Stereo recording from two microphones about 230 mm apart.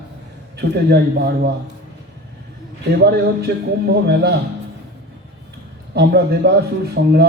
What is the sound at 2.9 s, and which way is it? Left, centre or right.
Speech, right.